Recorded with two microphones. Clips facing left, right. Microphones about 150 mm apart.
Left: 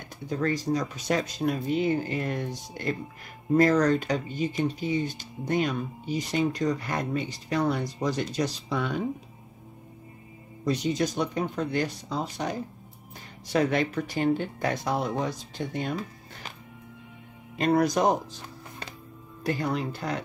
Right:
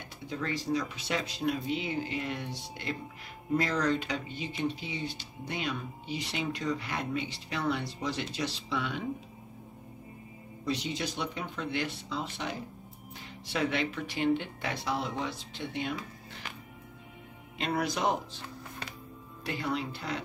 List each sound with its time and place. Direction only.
0.3 s speech: 45° left (ahead or behind)
10.6 s speech: 45° left (ahead or behind)
17.6 s speech: 40° left (ahead or behind)